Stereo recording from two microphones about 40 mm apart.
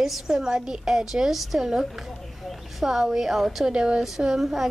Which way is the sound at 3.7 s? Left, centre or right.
Right.